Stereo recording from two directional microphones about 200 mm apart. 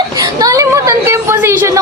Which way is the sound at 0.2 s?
15° right (ahead or behind).